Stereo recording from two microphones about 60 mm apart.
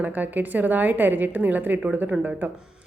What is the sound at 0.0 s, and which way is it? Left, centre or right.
A woman's voice, right.